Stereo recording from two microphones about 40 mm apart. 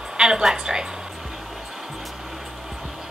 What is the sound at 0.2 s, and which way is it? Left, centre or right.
Speech, centre.